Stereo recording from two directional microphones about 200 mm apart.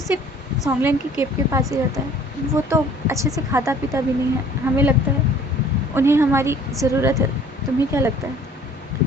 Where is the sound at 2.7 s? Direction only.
15° right (ahead or behind).